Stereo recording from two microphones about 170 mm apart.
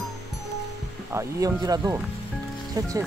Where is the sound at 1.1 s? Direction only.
15° right (ahead or behind).